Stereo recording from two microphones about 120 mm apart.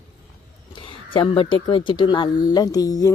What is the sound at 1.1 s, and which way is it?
Speech, 45° left (ahead or behind).